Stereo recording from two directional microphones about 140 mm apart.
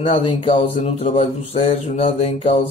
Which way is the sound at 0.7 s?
45° left (ahead or behind).